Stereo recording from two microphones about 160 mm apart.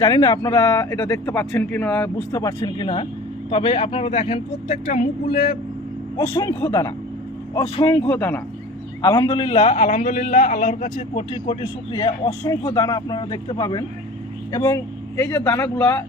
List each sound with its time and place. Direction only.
0.0 s speech: 25° left (ahead or behind); by 2.0 s 10° left (ahead or behind)
2.3 s speech: 20° left (ahead or behind)
2.6 s a man's voice: 35° left (ahead or behind); by 5.5 s 50° left (ahead or behind)
6.1 s speech: 25° left (ahead or behind)
7.9 s speech: 10° left (ahead or behind)
9.0 s a man's voice: 25° left (ahead or behind)